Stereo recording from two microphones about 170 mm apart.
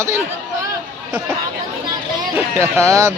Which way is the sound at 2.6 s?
15° right (ahead or behind).